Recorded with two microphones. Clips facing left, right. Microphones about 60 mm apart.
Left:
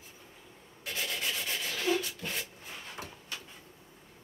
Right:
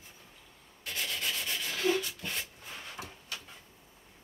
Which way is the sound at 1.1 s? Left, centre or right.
Centre.